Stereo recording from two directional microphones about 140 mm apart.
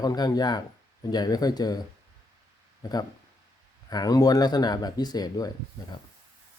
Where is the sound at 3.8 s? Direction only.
30° left (ahead or behind).